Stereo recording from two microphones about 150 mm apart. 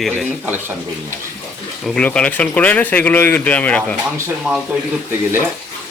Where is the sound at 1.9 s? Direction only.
10° left (ahead or behind).